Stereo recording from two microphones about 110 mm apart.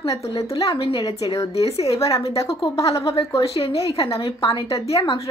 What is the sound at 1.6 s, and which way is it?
Speech, 65° left (ahead or behind).